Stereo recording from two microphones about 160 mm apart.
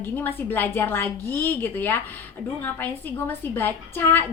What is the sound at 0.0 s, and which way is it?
A woman's voice, 15° left (ahead or behind).